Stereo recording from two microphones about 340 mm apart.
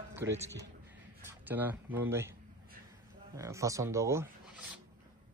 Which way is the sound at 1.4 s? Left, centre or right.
Centre.